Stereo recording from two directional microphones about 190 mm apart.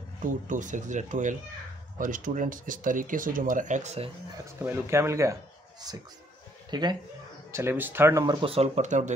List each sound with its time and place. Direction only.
0.5 s speech: 40° right (ahead or behind)
4.6 s speech: 15° right (ahead or behind)
7.5 s speech: 10° right (ahead or behind); by 9.1 s 40° right (ahead or behind)